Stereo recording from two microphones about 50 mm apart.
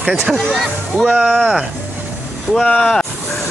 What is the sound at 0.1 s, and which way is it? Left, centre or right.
Speech, centre.